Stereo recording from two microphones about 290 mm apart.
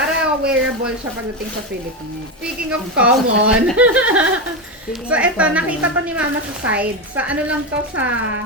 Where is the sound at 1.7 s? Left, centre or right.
Right.